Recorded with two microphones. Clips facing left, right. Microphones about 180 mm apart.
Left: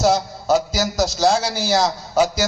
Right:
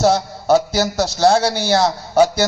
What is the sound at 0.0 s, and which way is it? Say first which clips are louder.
A man's voice: right 2 dB; 60° right (ahead or behind).